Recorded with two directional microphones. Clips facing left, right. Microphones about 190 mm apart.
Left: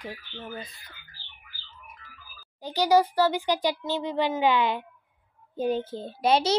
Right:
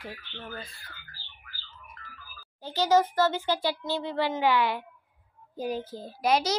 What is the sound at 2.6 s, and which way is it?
A child's voice, 15° left (ahead or behind).